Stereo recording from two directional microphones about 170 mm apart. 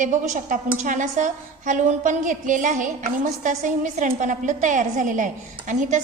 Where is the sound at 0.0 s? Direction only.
50° right (ahead or behind).